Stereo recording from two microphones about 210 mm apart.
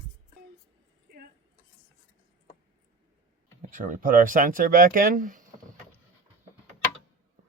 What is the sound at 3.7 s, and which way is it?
Speech, 40° right (ahead or behind).